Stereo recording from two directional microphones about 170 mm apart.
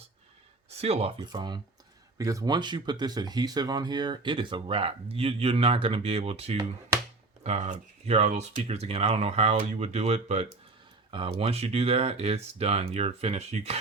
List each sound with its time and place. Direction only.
0.7 s speech: 35° right (ahead or behind)